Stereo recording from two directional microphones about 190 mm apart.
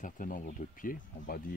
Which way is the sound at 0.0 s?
45° left (ahead or behind).